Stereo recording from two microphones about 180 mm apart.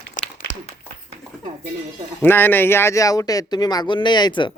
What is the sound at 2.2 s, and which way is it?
Speech, 10° left (ahead or behind).